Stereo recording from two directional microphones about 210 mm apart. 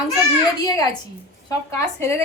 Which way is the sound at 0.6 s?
20° left (ahead or behind).